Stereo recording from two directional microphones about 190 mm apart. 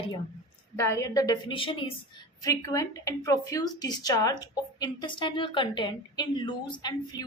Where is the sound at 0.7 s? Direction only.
15° left (ahead or behind).